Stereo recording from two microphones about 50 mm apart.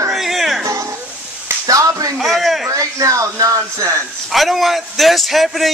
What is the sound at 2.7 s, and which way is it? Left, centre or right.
Speech, right.